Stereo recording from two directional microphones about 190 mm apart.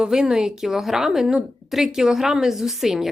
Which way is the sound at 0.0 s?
5° right (ahead or behind).